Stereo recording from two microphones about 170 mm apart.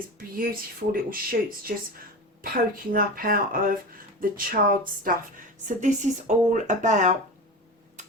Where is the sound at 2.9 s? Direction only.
55° right (ahead or behind).